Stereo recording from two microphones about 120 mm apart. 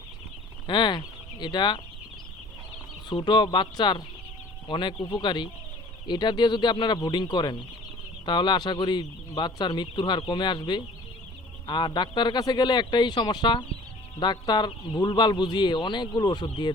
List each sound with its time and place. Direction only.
0.7 s speech: 40° left (ahead or behind)
3.1 s speech: 40° left (ahead or behind)